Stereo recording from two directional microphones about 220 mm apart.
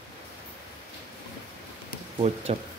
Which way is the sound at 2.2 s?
30° right (ahead or behind).